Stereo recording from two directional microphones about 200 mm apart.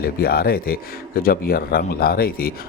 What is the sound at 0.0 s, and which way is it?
Speech, 50° left (ahead or behind).